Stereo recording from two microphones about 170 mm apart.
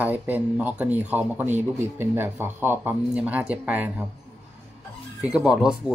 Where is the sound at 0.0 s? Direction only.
10° right (ahead or behind).